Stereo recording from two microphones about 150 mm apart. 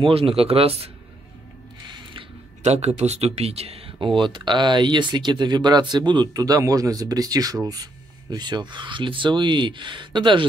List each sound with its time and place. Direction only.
0.0 s speech: 40° right (ahead or behind)
1.9 s a sound: 30° right (ahead or behind)
2.6 s speech: 45° right (ahead or behind)